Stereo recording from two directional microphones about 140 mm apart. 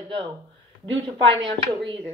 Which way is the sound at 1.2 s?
40° right (ahead or behind).